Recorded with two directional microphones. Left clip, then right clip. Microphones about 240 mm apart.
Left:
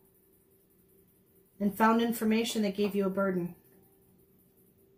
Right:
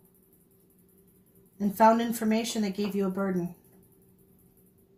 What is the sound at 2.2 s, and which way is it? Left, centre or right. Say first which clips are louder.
Speech: right 1 dB; right.